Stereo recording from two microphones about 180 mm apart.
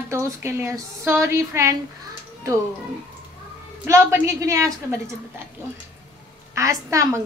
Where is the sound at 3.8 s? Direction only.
15° right (ahead or behind).